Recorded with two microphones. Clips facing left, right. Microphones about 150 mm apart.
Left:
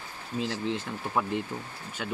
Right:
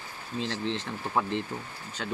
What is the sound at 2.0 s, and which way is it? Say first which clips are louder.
Speech: even; 10° left (ahead or behind).